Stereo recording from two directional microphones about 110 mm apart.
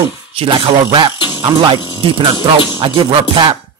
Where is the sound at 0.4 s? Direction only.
50° right (ahead or behind).